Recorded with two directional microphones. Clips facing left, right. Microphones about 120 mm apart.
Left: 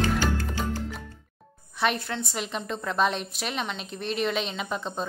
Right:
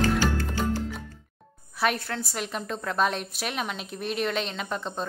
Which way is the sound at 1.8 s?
Centre (ahead or behind).